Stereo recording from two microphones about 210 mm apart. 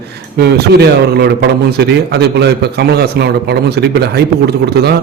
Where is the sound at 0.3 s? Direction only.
50° right (ahead or behind).